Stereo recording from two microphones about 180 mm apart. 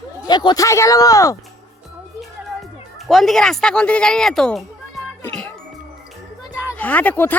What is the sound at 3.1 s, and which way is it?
A child's voice, centre (ahead or behind).